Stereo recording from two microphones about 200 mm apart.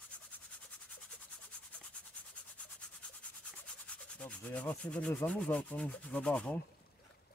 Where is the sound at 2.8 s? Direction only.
5° left (ahead or behind).